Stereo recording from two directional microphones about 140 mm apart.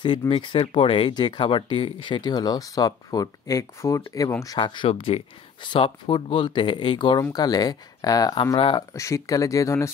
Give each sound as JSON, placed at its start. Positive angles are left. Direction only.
{"t": 0.3, "sound": "speech", "side_deg": 40}
{"t": 4.8, "sound": "speech", "side_deg": 45}
{"t": 8.5, "sound": "speech", "side_deg": 40}
{"t": 8.9, "sound": "speech", "side_deg": 20}